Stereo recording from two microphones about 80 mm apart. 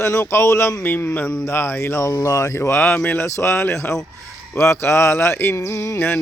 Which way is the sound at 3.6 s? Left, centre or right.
Left.